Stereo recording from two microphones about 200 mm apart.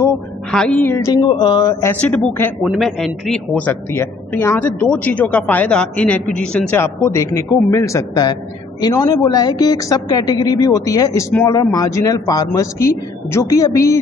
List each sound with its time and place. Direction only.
0.0 s a man's voice: 5° left (ahead or behind)
2.6 s a man's voice: centre (ahead or behind); by 13.9 s 15° left (ahead or behind)